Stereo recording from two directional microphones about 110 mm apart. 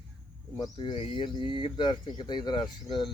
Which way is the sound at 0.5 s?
45° left (ahead or behind).